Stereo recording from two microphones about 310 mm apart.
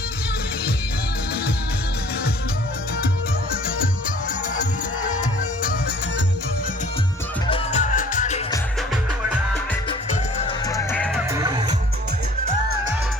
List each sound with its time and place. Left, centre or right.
7.5 s music: left
10.7 s music: centre
11.3 s music: centre